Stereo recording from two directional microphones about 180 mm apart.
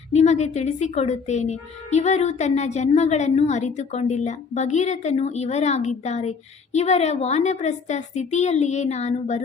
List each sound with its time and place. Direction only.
0.1 s speech: 40° left (ahead or behind)